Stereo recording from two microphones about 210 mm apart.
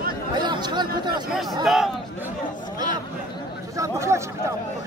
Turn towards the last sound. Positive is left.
turn(degrees=-15)  # may be behind; listen again after turning